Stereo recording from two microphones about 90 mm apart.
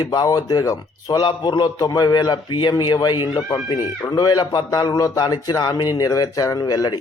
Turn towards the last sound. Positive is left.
turn(degrees=50)  # may be behind; listen again after turning